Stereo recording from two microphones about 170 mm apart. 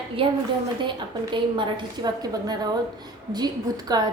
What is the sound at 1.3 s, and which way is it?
Speech, 25° right (ahead or behind).